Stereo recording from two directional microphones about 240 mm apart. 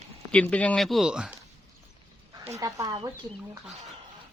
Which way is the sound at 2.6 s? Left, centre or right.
Centre.